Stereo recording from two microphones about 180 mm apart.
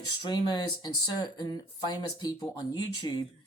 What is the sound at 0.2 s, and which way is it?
Speech, 25° left (ahead or behind).